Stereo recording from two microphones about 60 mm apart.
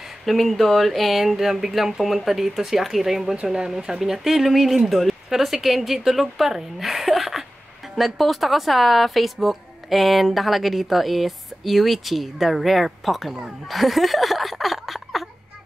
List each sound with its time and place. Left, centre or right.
0.2 s a woman's voice: centre